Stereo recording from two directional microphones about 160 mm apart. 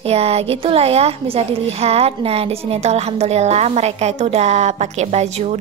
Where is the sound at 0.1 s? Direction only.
40° right (ahead or behind).